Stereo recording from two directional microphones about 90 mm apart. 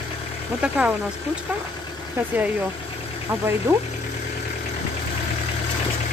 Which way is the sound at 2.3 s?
15° right (ahead or behind).